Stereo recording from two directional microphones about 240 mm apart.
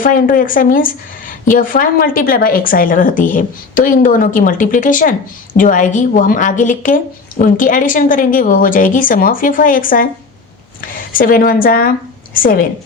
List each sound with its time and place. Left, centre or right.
0.0 s a woman's voice: left